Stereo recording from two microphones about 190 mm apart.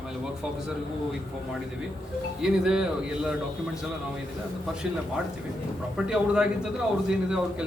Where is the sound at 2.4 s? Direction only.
5° right (ahead or behind).